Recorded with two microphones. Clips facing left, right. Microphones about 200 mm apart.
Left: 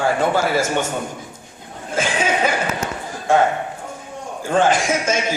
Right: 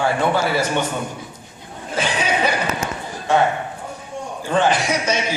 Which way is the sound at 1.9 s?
45° left (ahead or behind).